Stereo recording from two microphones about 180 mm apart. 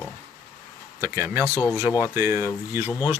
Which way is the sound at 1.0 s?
15° right (ahead or behind).